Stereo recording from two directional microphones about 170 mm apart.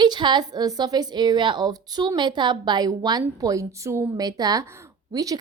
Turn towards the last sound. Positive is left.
turn(degrees=-20)  # may be behind; listen again after turning